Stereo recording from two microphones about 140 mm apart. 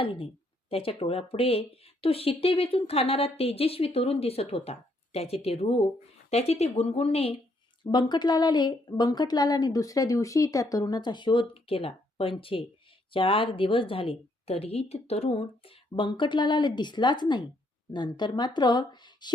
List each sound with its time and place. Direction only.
0.0 s a woman's voice: 40° left (ahead or behind)
7.9 s a woman's voice: 30° left (ahead or behind)